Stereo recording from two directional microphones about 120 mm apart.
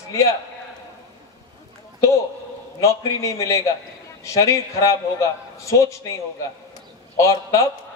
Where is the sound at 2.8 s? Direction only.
25° left (ahead or behind).